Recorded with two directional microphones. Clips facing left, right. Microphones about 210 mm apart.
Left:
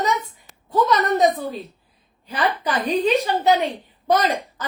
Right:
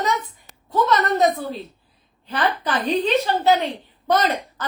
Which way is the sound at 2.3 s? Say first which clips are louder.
Even; 15° left (ahead or behind).